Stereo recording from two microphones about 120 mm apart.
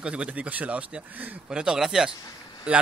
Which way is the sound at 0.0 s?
10° right (ahead or behind).